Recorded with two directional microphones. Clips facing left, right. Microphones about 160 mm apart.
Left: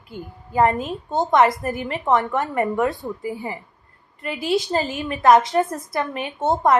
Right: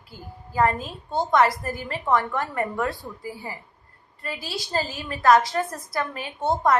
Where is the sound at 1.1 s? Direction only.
15° left (ahead or behind).